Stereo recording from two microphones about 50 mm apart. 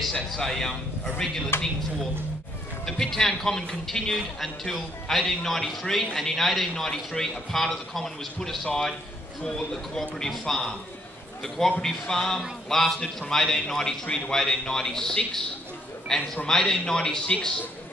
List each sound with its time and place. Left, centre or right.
0.0 s a man's voice: centre
1.5 s speech: left
2.8 s a man's voice: centre
9.4 s a man's voice: centre